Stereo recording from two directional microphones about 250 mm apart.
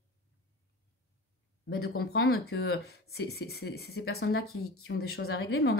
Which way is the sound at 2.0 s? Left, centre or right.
Left.